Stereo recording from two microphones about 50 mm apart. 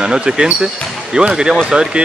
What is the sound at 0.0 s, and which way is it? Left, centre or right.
Speech, centre.